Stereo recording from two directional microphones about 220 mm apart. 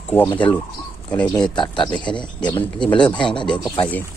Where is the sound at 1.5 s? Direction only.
20° left (ahead or behind).